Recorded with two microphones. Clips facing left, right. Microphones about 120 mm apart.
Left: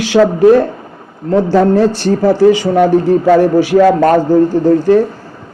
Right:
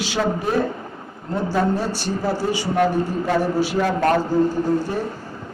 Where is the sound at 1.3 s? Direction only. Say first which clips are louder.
Left 11 dB; 90° left.